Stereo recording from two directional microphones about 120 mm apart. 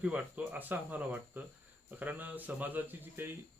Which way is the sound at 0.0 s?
10° right (ahead or behind).